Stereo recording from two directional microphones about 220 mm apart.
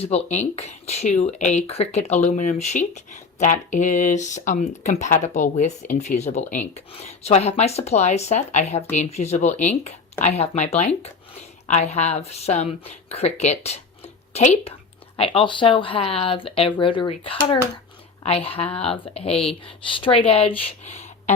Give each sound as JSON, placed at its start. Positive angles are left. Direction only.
{"t": 0.0, "sound": "speech", "side_deg": 30}